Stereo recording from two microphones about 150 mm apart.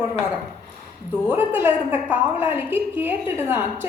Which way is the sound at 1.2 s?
15° right (ahead or behind).